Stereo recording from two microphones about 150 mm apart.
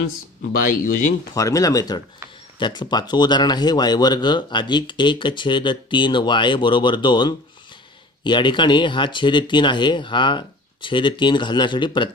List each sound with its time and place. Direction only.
0.6 s speech: 65° left (ahead or behind)
1.3 s speech: 20° left (ahead or behind)